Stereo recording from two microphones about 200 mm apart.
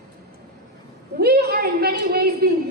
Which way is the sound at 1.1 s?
50° right (ahead or behind).